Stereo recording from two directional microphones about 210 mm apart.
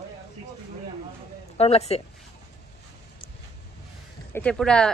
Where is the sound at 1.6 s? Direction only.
30° left (ahead or behind).